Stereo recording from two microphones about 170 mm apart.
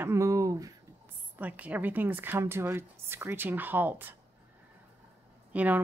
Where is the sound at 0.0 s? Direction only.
15° right (ahead or behind).